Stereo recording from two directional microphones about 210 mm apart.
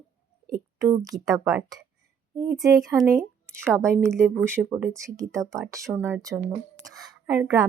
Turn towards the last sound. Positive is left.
turn(degrees=-15)  # may be behind; listen again after turning